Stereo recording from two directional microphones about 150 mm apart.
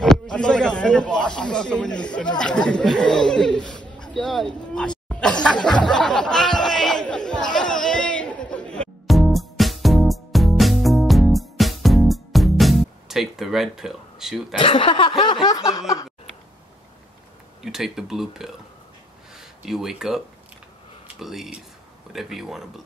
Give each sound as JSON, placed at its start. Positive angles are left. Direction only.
{"t": 0.0, "sound": "snake", "side_deg": 5}
{"t": 14.6, "sound": "speech", "side_deg": 35}
{"t": 15.4, "sound": "snicker", "side_deg": 25}
{"t": 17.6, "sound": "speech", "side_deg": -5}